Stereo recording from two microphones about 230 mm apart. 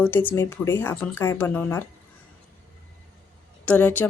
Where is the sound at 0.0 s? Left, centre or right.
Centre.